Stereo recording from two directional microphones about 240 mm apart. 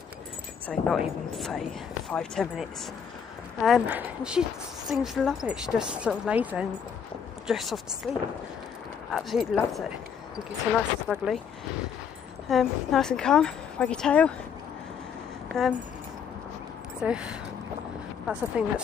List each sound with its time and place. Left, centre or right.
0.7 s a woman's voice: centre
9.1 s a woman's voice: centre
10.7 s a woman's voice: centre
12.4 s a woman's voice: centre
15.4 s a sound: centre
17.0 s a woman's voice: centre